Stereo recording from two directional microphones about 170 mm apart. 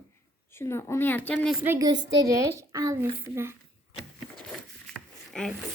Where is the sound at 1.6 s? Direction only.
20° right (ahead or behind).